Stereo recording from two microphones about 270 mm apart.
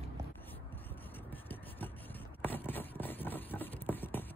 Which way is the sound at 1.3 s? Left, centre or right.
Centre.